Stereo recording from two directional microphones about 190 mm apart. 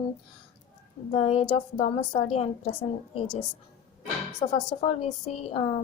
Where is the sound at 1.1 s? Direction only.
35° left (ahead or behind).